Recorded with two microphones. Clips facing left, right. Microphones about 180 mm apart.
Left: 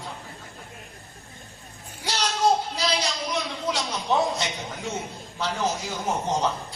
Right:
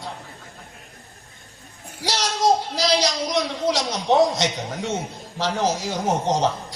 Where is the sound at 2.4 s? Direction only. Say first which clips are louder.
Right 3 dB; 85° right.